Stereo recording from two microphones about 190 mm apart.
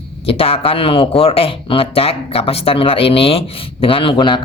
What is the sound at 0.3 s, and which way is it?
Speech, 30° left (ahead or behind).